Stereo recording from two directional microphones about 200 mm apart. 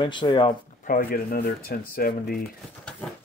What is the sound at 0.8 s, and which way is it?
Speech, 45° left (ahead or behind).